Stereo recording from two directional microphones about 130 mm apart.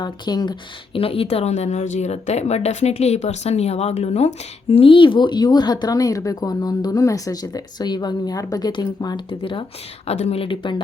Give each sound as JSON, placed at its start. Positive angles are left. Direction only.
{"t": 0.0, "sound": "a woman's voice", "side_deg": 35}
{"t": 0.9, "sound": "a woman's voice", "side_deg": 45}
{"t": 10.1, "sound": "a woman's voice", "side_deg": 55}